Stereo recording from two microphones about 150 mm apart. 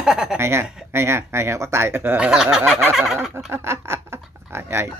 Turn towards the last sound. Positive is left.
turn(degrees=-15)  # may be behind; listen again after turning